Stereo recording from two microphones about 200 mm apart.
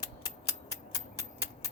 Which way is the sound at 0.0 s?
20° left (ahead or behind).